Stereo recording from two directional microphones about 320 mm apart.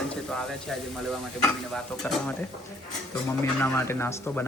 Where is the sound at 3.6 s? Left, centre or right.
Centre.